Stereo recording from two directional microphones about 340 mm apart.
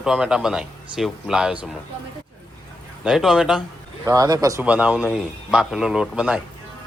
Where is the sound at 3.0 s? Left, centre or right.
Centre.